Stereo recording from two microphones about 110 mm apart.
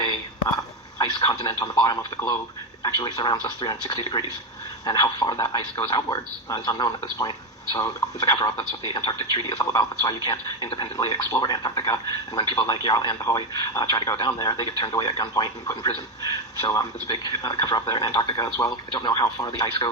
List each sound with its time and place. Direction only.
0.0 s a man's voice: 40° left (ahead or behind)
9.5 s speech: 35° left (ahead or behind)